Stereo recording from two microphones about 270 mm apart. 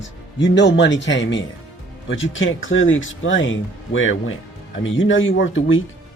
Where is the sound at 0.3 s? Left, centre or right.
Left.